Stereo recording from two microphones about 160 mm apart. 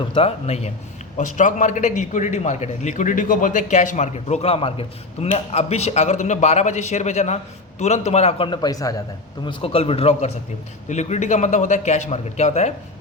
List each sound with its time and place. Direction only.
0.0 s a man's voice: 35° left (ahead or behind)
9.5 s a man's voice: 35° left (ahead or behind)